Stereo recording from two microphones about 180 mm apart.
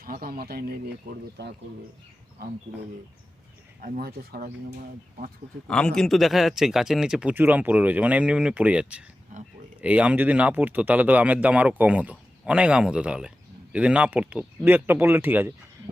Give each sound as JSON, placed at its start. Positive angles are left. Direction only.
{"t": 0.0, "sound": "speech", "side_deg": -50}
{"t": 3.8, "sound": "speech", "side_deg": -50}
{"t": 4.7, "sound": "speech", "side_deg": -45}
{"t": 5.6, "sound": "speech", "side_deg": 5}